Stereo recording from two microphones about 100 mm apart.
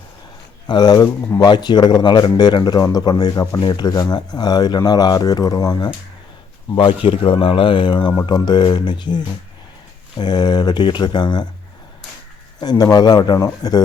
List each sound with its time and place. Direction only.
0.7 s speech: 45° left (ahead or behind)
6.7 s speech: 65° left (ahead or behind); by 11.4 s 45° left (ahead or behind)
12.5 s speech: 45° left (ahead or behind)